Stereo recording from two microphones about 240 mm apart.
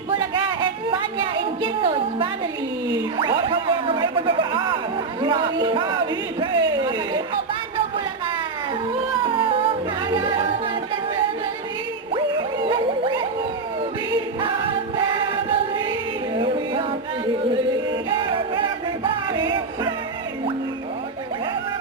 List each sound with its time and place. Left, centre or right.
0.1 s a sound: centre
3.2 s music: right
6.4 s a sound: centre
9.2 s music: right
12.1 s music: right
14.9 s music: centre
18.1 s music: centre